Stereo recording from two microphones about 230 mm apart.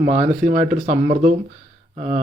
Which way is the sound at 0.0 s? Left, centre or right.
Right.